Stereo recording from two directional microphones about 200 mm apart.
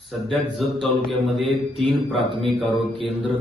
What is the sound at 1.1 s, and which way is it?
Speech, centre (ahead or behind).